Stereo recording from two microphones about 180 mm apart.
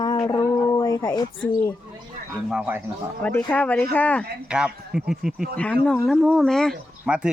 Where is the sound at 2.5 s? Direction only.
5° right (ahead or behind).